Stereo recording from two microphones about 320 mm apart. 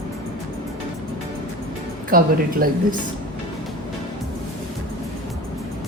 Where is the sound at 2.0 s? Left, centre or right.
Right.